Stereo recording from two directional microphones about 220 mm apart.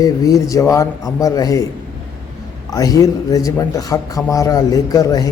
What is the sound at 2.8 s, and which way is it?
A man's voice, 15° left (ahead or behind).